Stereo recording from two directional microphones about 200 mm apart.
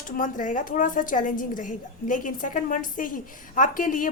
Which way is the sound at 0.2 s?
40° left (ahead or behind).